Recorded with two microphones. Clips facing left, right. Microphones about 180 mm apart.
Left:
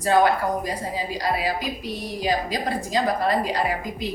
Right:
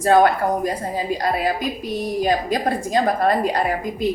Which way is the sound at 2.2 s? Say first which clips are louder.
Right 3 dB; 50° right (ahead or behind).